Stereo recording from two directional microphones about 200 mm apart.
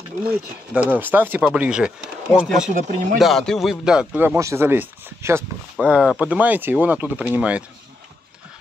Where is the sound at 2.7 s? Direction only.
40° right (ahead or behind).